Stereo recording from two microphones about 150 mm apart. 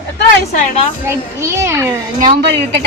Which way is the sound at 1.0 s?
20° right (ahead or behind).